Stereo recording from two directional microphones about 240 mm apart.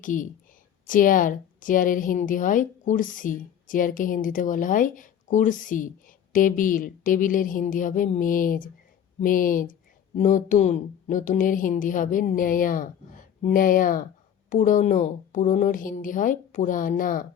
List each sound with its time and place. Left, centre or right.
0.0 s a woman's voice: left